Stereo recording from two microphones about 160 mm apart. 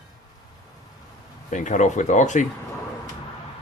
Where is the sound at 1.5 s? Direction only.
50° left (ahead or behind).